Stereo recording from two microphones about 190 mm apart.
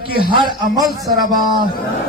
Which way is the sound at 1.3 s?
20° right (ahead or behind).